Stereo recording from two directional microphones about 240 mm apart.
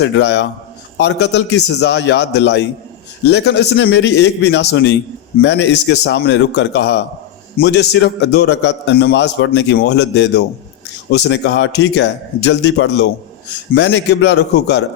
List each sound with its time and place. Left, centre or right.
0.0 s a man's voice: left